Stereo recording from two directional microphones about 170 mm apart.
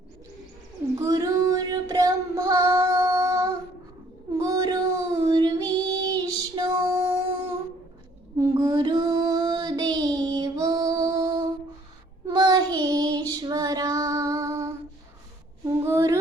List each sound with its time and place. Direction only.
0.9 s child singing: 20° right (ahead or behind)
8.6 s child singing: 25° right (ahead or behind)
15.8 s female singing: 15° right (ahead or behind)